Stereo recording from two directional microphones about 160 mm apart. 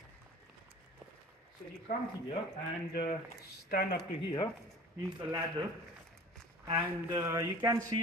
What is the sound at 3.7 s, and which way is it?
Speech, 70° left (ahead or behind).